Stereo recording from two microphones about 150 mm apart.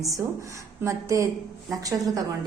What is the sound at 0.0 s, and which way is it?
A woman's voice, 20° right (ahead or behind).